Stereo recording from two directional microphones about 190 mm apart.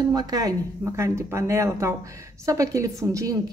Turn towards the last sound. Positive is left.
turn(degrees=-20)  # may be behind; listen again after turning